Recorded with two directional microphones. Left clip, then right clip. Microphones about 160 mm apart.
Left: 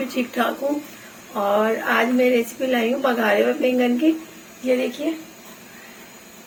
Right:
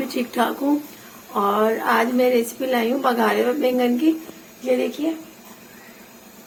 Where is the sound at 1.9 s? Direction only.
90° right.